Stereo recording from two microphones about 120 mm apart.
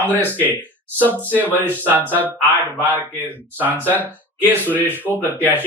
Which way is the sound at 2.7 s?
15° right (ahead or behind).